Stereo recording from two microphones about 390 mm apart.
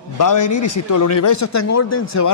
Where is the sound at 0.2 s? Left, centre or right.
Left.